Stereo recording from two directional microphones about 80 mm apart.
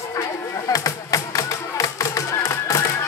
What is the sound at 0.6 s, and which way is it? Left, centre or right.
Music, left.